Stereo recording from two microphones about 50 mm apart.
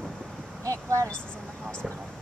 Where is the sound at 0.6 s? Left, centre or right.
Right.